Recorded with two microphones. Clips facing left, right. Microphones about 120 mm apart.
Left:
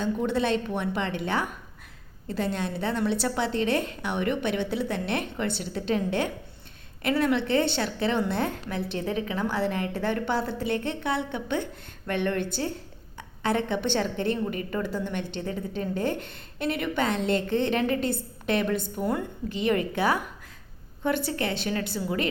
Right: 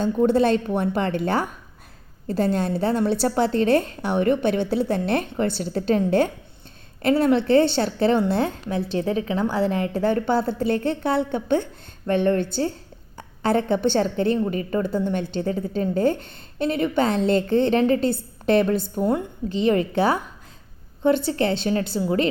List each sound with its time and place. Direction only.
0.0 s a woman's voice: 40° right (ahead or behind)